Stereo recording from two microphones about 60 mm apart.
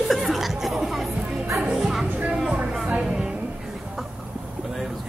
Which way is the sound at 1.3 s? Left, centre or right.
Centre.